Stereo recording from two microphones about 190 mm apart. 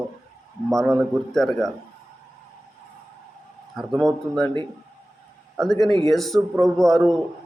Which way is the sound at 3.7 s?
Centre (ahead or behind).